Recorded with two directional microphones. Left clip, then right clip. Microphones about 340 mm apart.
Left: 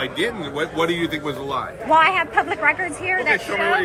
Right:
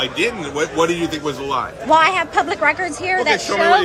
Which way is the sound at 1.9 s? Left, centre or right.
Centre.